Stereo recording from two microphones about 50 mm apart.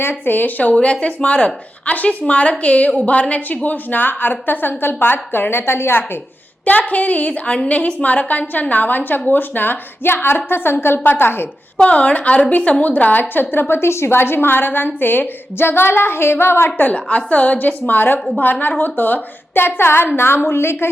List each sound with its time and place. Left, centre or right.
0.0 s a woman's voice: left
6.7 s a woman's voice: left
11.8 s a woman's voice: left
16.9 s a woman's voice: left